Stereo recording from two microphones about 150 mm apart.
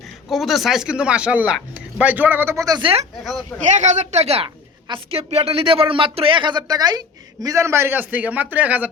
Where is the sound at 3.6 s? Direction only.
50° right (ahead or behind).